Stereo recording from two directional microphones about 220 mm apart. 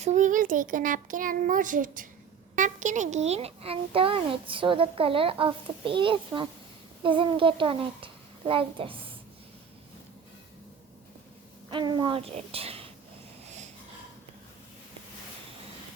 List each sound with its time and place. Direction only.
0.0 s a child's voice: 35° right (ahead or behind)
11.7 s a child's voice: 20° right (ahead or behind)